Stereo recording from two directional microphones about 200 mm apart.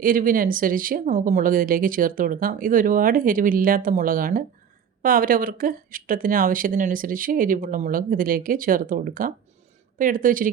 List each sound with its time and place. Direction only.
0.0 s speech: 45° right (ahead or behind)